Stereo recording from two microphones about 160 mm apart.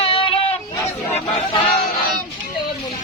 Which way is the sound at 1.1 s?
35° left (ahead or behind).